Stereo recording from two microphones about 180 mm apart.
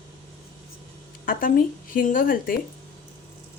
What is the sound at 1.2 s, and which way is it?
Speech, 50° left (ahead or behind).